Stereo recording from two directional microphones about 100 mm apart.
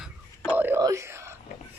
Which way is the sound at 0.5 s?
20° right (ahead or behind).